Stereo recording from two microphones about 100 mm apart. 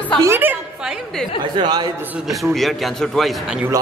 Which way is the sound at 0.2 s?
25° right (ahead or behind).